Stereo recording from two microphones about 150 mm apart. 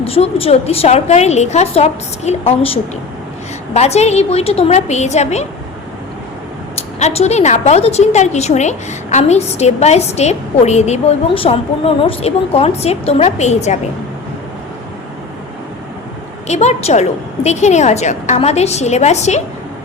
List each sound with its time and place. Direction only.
0.0 s a woman's voice: 40° left (ahead or behind)
7.0 s a woman's voice: 45° left (ahead or behind)
16.5 s a woman's voice: 50° left (ahead or behind)